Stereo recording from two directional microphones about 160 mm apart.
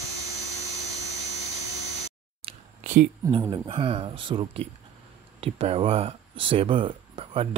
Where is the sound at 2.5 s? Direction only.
35° right (ahead or behind).